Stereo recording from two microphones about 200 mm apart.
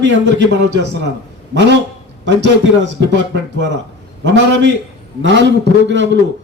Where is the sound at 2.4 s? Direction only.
65° right (ahead or behind).